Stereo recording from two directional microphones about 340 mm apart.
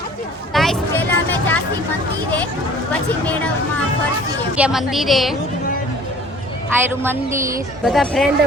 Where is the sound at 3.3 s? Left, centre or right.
Centre.